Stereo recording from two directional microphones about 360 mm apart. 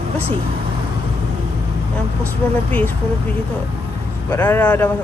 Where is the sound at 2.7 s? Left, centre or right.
Centre.